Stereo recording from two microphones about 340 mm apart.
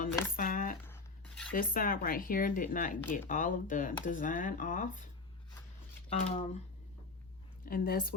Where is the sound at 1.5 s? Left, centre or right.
Left.